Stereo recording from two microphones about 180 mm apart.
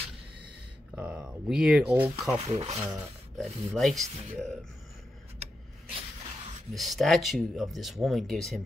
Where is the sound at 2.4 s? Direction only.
35° right (ahead or behind).